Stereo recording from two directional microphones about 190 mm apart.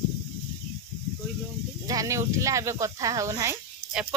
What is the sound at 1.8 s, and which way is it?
Speech, 15° right (ahead or behind).